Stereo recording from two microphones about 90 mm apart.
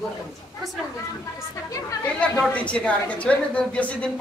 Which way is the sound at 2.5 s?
15° left (ahead or behind).